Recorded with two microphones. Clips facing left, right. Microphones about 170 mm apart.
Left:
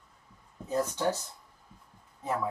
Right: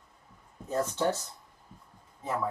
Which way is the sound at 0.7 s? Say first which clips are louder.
Even; 15° left (ahead or behind).